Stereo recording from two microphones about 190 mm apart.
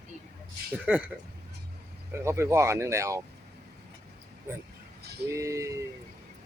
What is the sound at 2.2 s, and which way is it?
Speech, 15° right (ahead or behind).